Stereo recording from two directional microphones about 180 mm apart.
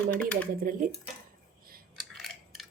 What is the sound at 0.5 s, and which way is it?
Speech, 50° right (ahead or behind).